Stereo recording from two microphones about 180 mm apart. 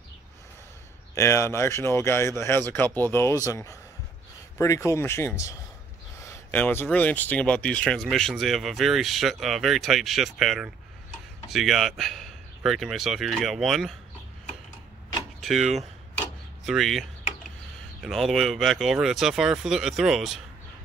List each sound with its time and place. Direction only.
1.1 s speech: 15° left (ahead or behind); by 13.9 s centre (ahead or behind)
15.4 s speech: centre (ahead or behind)
18.0 s speech: centre (ahead or behind)